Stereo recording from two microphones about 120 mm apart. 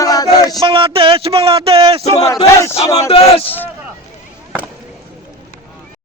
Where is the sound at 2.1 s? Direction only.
30° left (ahead or behind).